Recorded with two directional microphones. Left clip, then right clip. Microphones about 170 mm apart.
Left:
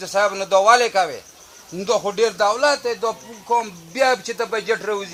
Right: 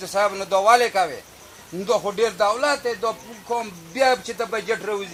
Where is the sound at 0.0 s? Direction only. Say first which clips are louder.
Left 2 dB; 50° left (ahead or behind).